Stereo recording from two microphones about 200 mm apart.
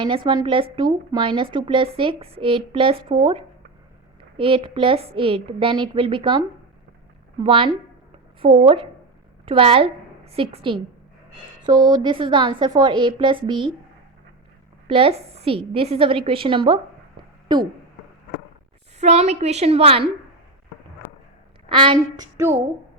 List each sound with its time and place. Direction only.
0.0 s speech: 25° right (ahead or behind)
7.4 s a woman's voice: 25° right (ahead or behind)
14.8 s speech: 25° right (ahead or behind)
18.9 s a woman's voice: 35° right (ahead or behind)
21.7 s speech: 25° right (ahead or behind)